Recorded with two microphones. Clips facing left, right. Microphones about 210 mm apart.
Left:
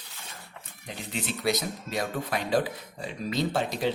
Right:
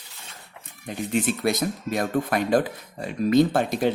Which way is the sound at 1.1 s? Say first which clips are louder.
Right 5 dB; 50° right (ahead or behind).